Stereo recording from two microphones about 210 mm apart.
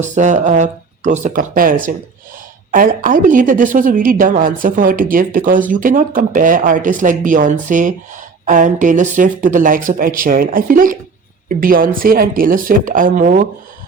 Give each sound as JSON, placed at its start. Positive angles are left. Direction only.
{"t": 0.0, "sound": "speech", "side_deg": -35}